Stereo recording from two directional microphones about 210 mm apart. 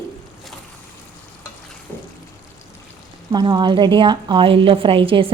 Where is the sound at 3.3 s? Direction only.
20° right (ahead or behind).